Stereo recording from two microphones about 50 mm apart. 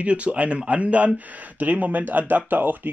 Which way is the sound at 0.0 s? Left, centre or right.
Right.